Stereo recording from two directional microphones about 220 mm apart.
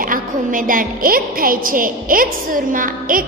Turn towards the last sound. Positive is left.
turn(degrees=-40)  # may be behind; listen again after turning